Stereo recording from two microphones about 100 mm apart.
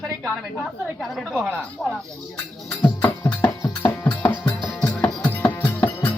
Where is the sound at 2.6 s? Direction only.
15° left (ahead or behind).